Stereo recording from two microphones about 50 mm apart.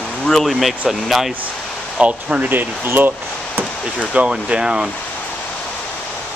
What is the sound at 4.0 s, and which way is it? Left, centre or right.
Speech, right.